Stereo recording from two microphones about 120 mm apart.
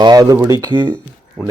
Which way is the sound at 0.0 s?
35° right (ahead or behind).